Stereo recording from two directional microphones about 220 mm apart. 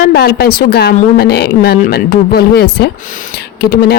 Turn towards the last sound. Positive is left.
turn(degrees=45)  # may be behind; listen again after turning